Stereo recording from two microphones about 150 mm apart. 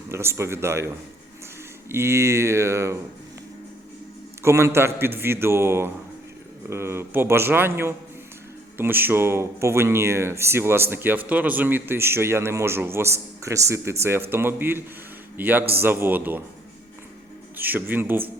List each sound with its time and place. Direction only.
0.1 s speech: 15° right (ahead or behind)
1.9 s speech: 15° right (ahead or behind)
4.4 s speech: 20° right (ahead or behind)
17.6 s speech: 10° right (ahead or behind)